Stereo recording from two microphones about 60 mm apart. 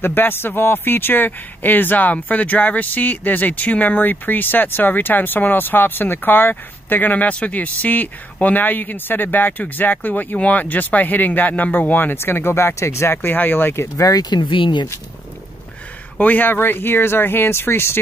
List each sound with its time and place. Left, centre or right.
0.0 s speech: left
13.9 s speech: left
16.2 s speech: left